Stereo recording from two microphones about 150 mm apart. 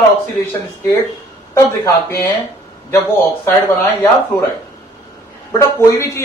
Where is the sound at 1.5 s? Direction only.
20° left (ahead or behind).